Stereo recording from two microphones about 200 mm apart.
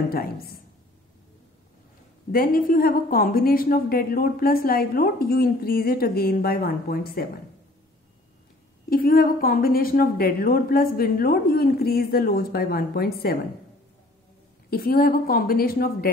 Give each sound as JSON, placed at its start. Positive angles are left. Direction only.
{"t": 0.1, "sound": "a woman's voice", "side_deg": 50}
{"t": 2.3, "sound": "a woman's voice", "side_deg": 45}
{"t": 8.9, "sound": "a woman's voice", "side_deg": 45}
{"t": 14.7, "sound": "a woman's voice", "side_deg": 50}